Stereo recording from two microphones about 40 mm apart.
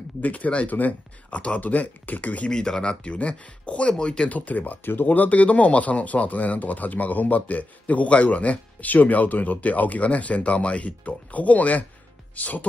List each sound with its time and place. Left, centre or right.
0.2 s speech: left
0.7 s speech: left
1.3 s speech: left
2.5 s speech: centre
3.1 s speech: left
4.0 s speech: centre
4.3 s speech: left